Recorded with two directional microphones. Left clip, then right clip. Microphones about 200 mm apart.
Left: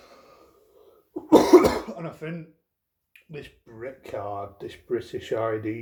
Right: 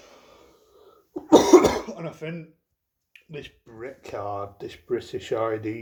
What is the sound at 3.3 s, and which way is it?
Speech, 30° right (ahead or behind).